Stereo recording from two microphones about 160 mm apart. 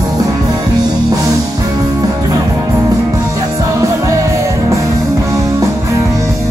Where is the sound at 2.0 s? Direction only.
20° right (ahead or behind).